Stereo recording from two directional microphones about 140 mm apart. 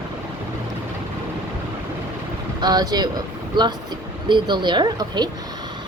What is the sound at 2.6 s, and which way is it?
Speech, 30° right (ahead or behind).